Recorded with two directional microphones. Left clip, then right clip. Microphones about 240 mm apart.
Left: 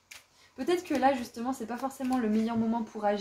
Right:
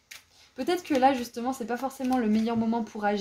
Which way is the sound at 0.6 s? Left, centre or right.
Right.